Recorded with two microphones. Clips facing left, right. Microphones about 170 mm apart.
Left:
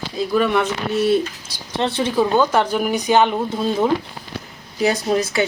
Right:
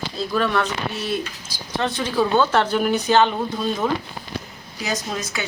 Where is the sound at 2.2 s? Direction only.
10° left (ahead or behind).